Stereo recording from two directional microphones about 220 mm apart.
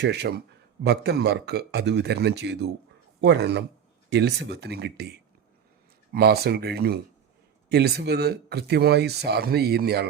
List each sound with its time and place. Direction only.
0.0 s speech: 50° right (ahead or behind)
6.1 s speech: 45° right (ahead or behind)